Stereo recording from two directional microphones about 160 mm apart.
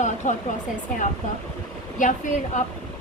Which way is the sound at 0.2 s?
50° left (ahead or behind).